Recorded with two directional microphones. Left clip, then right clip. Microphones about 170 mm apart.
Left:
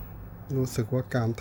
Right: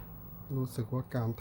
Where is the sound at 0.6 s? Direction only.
15° left (ahead or behind).